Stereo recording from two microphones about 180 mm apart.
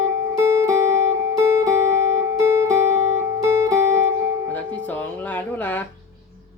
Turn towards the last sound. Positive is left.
turn(degrees=10)  # may be behind; listen again after turning